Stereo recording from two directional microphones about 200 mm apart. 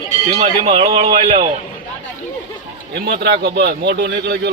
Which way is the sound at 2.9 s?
50° right (ahead or behind).